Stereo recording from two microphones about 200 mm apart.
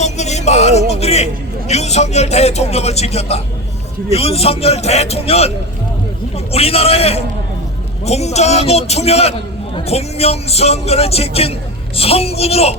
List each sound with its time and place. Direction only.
0.0 s a man's voice: 35° left (ahead or behind)